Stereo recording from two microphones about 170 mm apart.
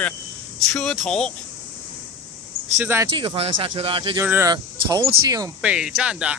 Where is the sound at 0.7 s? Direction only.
Centre (ahead or behind).